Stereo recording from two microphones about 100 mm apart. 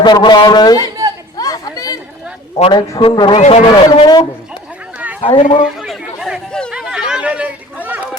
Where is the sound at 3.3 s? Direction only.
80° left.